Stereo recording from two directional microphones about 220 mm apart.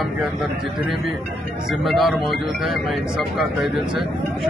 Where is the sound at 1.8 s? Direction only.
Centre (ahead or behind).